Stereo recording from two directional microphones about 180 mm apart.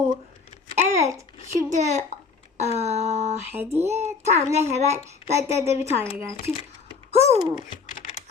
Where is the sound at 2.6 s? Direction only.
40° right (ahead or behind).